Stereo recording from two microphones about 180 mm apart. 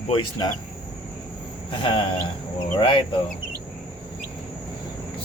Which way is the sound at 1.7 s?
30° left (ahead or behind).